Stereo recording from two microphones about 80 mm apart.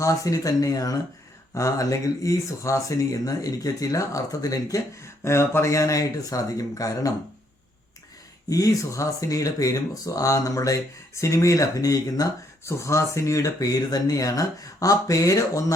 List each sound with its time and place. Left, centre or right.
0.0 s speech: left
8.4 s speech: left